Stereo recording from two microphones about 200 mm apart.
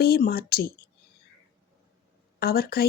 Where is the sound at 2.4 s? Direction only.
50° left (ahead or behind).